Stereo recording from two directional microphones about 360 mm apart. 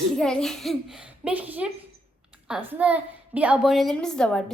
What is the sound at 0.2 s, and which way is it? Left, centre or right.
A woman's voice, centre.